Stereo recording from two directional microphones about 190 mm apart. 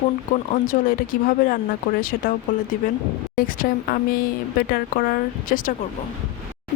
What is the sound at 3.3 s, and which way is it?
Speech, 45° left (ahead or behind).